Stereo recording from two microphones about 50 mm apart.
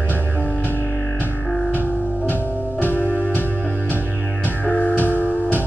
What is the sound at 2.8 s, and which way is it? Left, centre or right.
Music, left.